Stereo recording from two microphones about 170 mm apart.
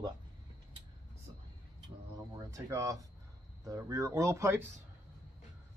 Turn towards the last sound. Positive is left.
turn(degrees=-15)  # may be behind; listen again after turning